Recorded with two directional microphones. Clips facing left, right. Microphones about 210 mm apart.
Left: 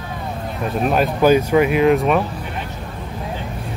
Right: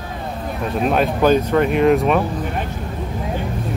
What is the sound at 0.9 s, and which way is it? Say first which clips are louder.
Speech: left 1 dB; 5° left (ahead or behind).